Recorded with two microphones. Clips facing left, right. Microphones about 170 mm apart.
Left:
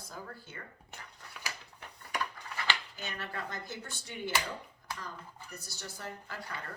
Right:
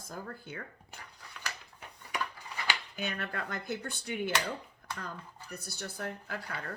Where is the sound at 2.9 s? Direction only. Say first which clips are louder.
Right 4 dB; 60° right (ahead or behind).